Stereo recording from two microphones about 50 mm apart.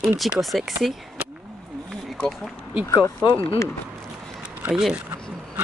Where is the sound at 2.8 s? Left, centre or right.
Left.